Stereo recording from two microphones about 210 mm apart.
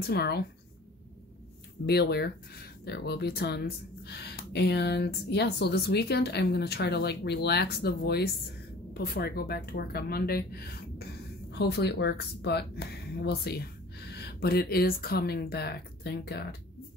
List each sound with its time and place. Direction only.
0.0 s speech: 50° left (ahead or behind)
1.9 s speech: 50° left (ahead or behind)